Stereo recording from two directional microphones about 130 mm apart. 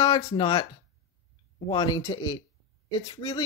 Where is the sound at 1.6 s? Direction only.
30° left (ahead or behind).